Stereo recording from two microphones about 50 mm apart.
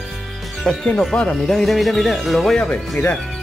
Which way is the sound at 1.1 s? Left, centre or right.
Left.